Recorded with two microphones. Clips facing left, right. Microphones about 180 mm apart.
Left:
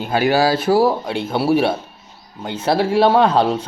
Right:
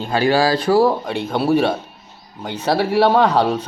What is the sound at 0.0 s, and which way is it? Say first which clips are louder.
Speech: even; 5° left (ahead or behind).